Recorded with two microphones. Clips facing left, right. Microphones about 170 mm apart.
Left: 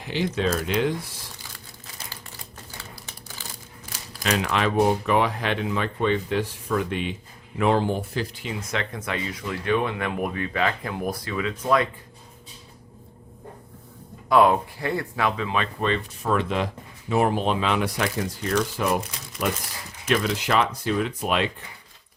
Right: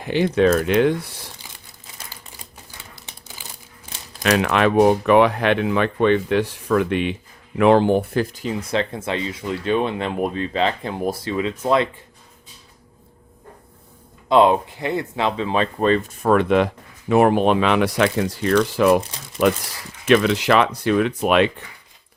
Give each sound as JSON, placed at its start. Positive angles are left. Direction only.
{"t": 0.0, "sound": "speech", "side_deg": -55}
{"t": 2.9, "sound": "crumpling", "side_deg": -20}
{"t": 4.2, "sound": "speech", "side_deg": -70}
{"t": 14.3, "sound": "speech", "side_deg": -25}